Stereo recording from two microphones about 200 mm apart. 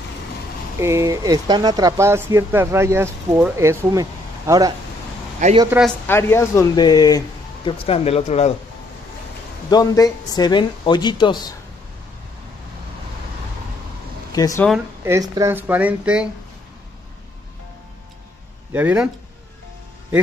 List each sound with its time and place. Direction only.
0.7 s speech: 15° right (ahead or behind)
5.7 s speech: centre (ahead or behind)
6.0 s speech: 10° left (ahead or behind); by 8.5 s 35° left (ahead or behind)
9.7 s speech: 20° left (ahead or behind)
14.3 s speech: 20° left (ahead or behind)
15.0 s speech: 15° right (ahead or behind)
18.7 s speech: 10° right (ahead or behind)